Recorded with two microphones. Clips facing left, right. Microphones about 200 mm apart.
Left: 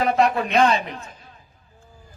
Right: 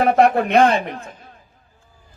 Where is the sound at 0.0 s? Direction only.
50° right (ahead or behind).